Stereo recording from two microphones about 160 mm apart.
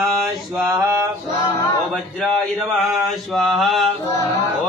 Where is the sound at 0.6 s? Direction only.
20° right (ahead or behind).